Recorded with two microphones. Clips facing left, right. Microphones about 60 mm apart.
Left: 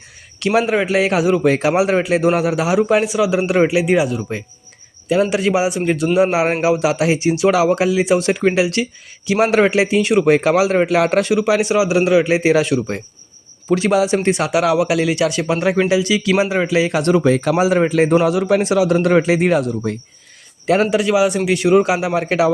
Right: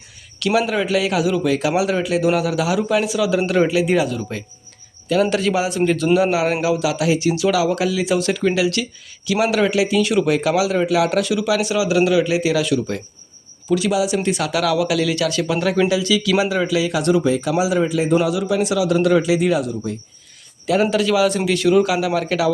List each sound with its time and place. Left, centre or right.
0.3 s a sound: left
0.7 s speech: left
6.3 s a man's voice: left
20.9 s speech: left